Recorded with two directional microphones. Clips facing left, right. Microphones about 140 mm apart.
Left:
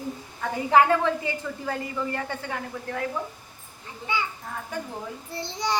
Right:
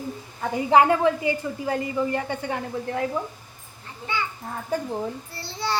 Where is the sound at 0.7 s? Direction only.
20° right (ahead or behind).